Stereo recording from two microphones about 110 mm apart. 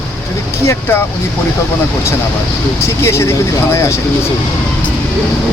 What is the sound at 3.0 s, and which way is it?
Speech, 25° left (ahead or behind).